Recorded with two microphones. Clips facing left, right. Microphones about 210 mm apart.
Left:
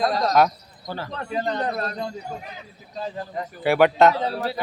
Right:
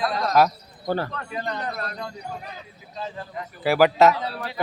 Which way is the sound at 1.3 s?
30° left (ahead or behind).